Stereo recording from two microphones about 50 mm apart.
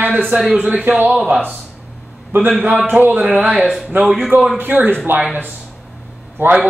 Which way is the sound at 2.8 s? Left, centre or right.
Right.